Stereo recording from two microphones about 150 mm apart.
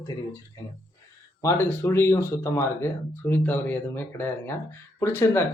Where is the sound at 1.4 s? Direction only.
15° left (ahead or behind).